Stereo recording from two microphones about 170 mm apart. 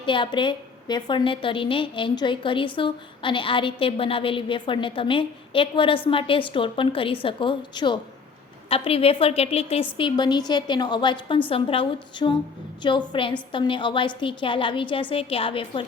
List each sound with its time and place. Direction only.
0.0 s a woman's voice: 30° left (ahead or behind)
10.0 s a woman's voice: 25° left (ahead or behind)